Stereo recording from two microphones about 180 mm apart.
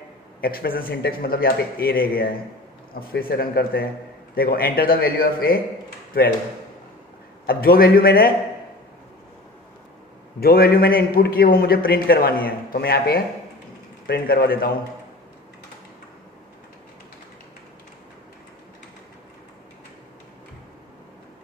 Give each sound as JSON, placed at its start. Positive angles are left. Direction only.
{"t": 0.4, "sound": "a man's voice", "side_deg": 55}
{"t": 7.4, "sound": "a man's voice", "side_deg": 55}
{"t": 10.4, "sound": "a man's voice", "side_deg": 60}